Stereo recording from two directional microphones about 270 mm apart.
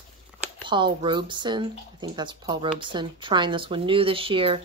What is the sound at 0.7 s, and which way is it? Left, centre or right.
Speech, centre.